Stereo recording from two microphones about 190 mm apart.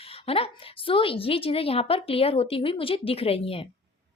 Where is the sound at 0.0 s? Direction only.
30° left (ahead or behind).